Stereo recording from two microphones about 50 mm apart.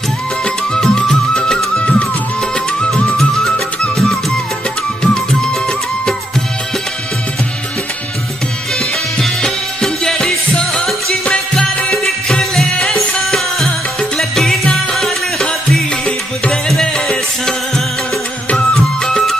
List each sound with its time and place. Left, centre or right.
0.7 s music: centre
3.2 s music: centre
8.7 s music: centre
16.8 s music: centre
19.0 s music: centre